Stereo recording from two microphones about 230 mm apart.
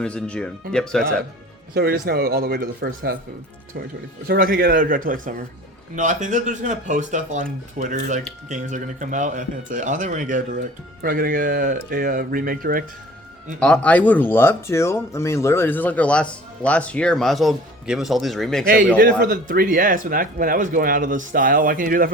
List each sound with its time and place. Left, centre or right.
0.0 s speech: centre
1.7 s speech: right
4.3 s speech: right
13.6 s speech: centre
18.9 s speech: right